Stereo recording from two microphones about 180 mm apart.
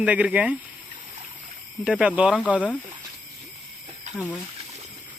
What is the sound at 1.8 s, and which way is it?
Speech, 5° right (ahead or behind).